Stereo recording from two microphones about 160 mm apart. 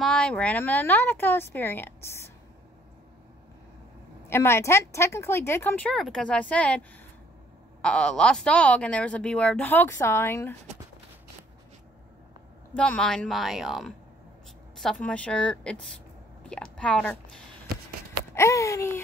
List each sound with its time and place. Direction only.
0.0 s speech: 5° left (ahead or behind)
4.3 s speech: 15° left (ahead or behind)
12.7 s speech: 5° left (ahead or behind)
18.3 s a sound: 20° left (ahead or behind)